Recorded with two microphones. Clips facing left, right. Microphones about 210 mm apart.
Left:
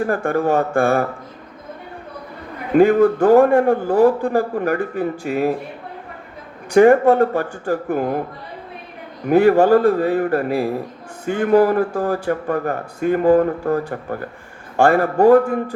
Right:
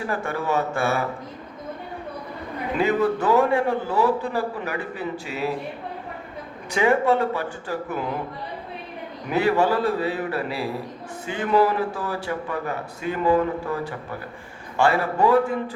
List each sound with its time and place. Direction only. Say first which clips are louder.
0.0 s a man's voice: left 8 dB; 50° left (ahead or behind)
2.7 s a man's voice: left 9 dB; 50° left (ahead or behind)
6.7 s a man's voice: left 9 dB; 50° left (ahead or behind)
9.2 s a man's voice: left 8 dB; 50° left (ahead or behind)